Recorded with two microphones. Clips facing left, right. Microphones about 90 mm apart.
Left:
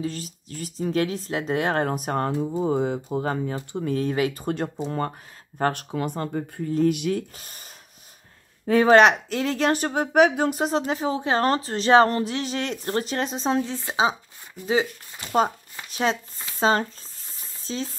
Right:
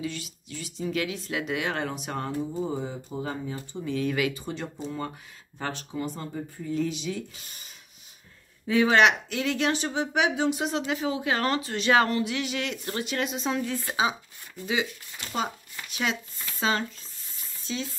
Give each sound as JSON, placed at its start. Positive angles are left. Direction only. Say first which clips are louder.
{"t": 0.0, "sound": "speech", "louder": "left 4 dB", "side_deg": 40}
{"t": 4.0, "sound": "speech", "louder": "left 1 dB", "side_deg": 35}
{"t": 4.4, "sound": "speech", "louder": "left 7 dB", "side_deg": 55}
{"t": 15.7, "sound": "shuffling cards", "louder": "left 5 dB", "side_deg": 35}
{"t": 16.5, "sound": "speech", "louder": "left 6 dB", "side_deg": 35}
{"t": 17.4, "sound": "a sound", "louder": "left 3 dB", "side_deg": 35}